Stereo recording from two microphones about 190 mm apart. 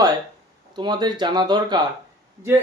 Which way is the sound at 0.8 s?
25° right (ahead or behind).